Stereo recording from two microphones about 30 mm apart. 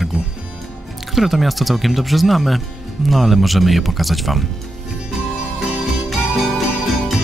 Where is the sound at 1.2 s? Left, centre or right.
Centre.